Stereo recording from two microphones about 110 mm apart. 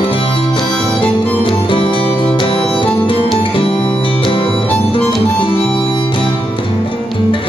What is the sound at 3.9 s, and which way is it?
Music, 50° left (ahead or behind).